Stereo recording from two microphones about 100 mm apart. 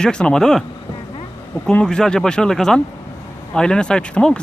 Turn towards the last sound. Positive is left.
turn(degrees=10)  # may be behind; listen again after turning